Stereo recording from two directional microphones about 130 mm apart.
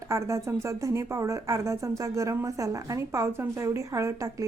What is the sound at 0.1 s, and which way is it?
A woman's voice, 25° right (ahead or behind).